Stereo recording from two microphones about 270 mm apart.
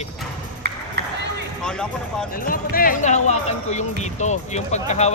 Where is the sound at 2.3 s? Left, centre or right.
Left.